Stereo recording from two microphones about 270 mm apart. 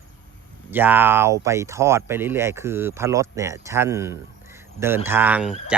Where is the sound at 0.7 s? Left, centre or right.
Centre.